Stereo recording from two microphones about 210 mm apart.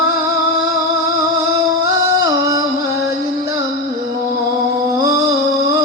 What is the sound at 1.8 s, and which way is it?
Music, 15° right (ahead or behind).